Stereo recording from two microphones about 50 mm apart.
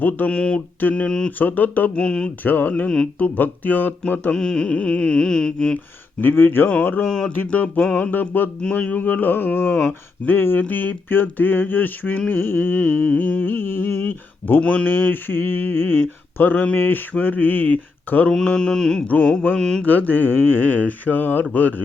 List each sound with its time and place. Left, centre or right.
0.3 s music: left
0.8 s music: left
2.0 s music: centre
2.4 s music: left
4.4 s music: centre
6.2 s speech: left
6.8 s music: left
8.7 s music: left
9.2 s speech: left
10.6 s music: left
18.3 s mantra: centre
19.0 s music: left
19.5 s mantra: centre
19.8 s music: left